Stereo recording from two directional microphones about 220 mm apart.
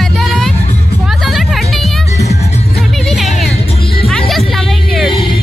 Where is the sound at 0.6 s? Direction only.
25° left (ahead or behind).